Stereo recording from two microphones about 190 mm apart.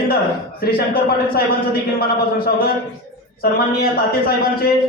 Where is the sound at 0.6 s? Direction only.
50° left (ahead or behind).